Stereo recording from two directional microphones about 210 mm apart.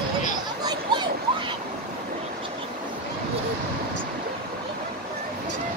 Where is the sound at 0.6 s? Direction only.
20° right (ahead or behind).